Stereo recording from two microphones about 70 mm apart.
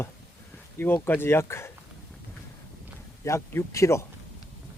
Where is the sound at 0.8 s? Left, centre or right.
Left.